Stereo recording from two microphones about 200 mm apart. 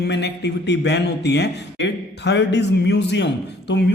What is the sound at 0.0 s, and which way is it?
Mantra, 60° left (ahead or behind).